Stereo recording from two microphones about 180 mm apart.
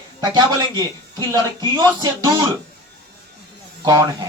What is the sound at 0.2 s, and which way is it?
Speech, 20° right (ahead or behind).